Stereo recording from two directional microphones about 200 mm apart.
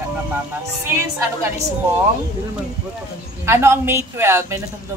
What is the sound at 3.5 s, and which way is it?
Speech, 15° right (ahead or behind).